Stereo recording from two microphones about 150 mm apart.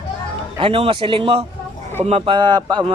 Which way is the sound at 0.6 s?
40° right (ahead or behind).